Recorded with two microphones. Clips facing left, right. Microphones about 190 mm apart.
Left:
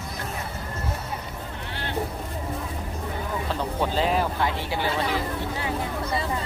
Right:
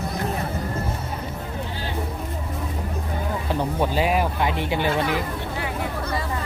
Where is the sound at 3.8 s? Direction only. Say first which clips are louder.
Right 1 dB; 10° right (ahead or behind).